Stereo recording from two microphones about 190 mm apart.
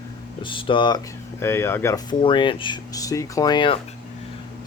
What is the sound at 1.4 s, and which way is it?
Speech, 10° left (ahead or behind).